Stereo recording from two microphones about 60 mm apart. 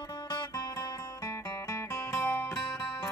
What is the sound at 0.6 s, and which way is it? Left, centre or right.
Music, left.